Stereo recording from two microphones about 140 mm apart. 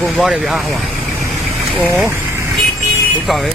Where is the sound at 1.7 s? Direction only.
Centre (ahead or behind).